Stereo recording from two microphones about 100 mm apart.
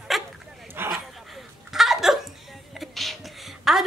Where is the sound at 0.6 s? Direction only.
20° right (ahead or behind).